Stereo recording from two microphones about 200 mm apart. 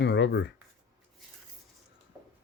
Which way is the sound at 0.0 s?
60° left (ahead or behind).